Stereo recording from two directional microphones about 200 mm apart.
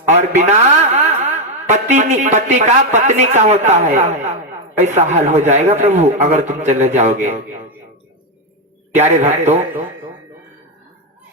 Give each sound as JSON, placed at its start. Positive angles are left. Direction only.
{"t": 0.1, "sound": "a man's voice", "side_deg": -35}
{"t": 9.0, "sound": "a man's voice", "side_deg": -35}